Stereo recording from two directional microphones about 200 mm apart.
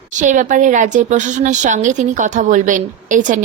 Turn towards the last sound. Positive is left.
turn(degrees=-40)  # may be behind; listen again after turning